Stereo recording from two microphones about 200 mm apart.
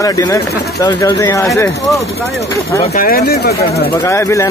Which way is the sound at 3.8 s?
15° left (ahead or behind).